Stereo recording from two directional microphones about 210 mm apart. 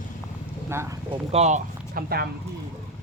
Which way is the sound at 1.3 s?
30° right (ahead or behind).